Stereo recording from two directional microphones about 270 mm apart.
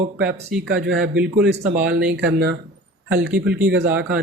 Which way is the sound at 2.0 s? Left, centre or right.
Right.